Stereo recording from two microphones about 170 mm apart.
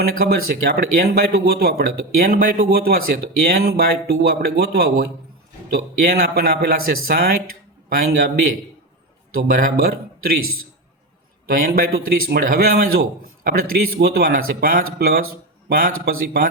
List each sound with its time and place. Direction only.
0.2 s a man's voice: 60° right (ahead or behind)
9.3 s a man's voice: 60° right (ahead or behind)
11.4 s a man's voice: 55° right (ahead or behind)